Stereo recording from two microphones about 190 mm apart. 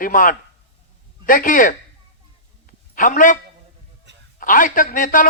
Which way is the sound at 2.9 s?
45° left (ahead or behind).